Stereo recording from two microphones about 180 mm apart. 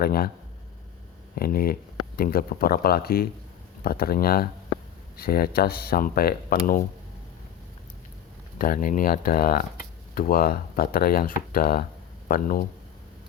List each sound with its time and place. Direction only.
0.0 s speech: 55° left (ahead or behind)
1.4 s speech: 55° left (ahead or behind)
8.5 s speech: 50° left (ahead or behind)